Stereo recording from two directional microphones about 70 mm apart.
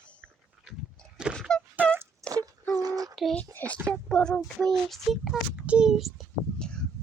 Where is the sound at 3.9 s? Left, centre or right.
Centre.